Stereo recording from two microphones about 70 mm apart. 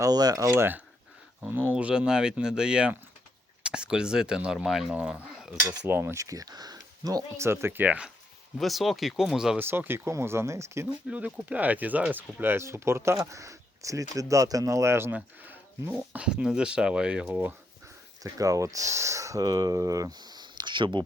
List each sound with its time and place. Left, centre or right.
0.0 s speech: right
0.5 s speech: right; by 4.9 s centre
6.0 s speech: right
7.3 s speech: right
8.5 s speech: centre
9.6 s speech: right
10.8 s speech: right
13.1 s speech: right
15.1 s speech: right
15.9 s speech: centre
18.2 s speech: right